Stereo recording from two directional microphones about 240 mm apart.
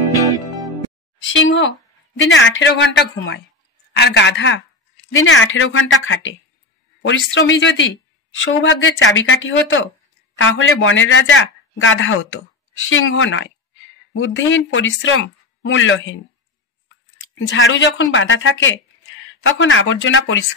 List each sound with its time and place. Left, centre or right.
1.2 s a woman's voice: left
17.5 s speech: left